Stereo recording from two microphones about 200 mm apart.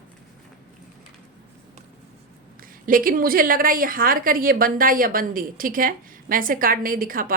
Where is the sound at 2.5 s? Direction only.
45° right (ahead or behind).